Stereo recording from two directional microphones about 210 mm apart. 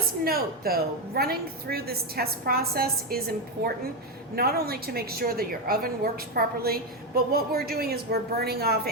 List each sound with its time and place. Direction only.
0.3 s a woman's voice: 45° right (ahead or behind)